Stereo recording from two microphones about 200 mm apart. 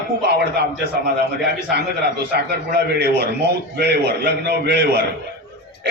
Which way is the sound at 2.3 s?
55° right (ahead or behind).